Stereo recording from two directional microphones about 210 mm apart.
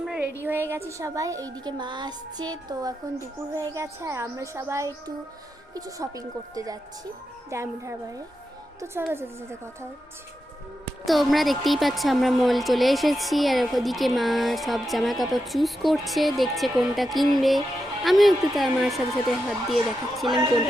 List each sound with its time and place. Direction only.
0.0 s a sound: 5° right (ahead or behind)
0.4 s speech: 10° right (ahead or behind)
11.0 s a woman's voice: centre (ahead or behind)